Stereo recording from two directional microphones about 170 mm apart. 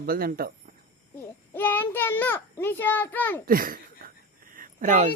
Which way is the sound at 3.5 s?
60° right (ahead or behind).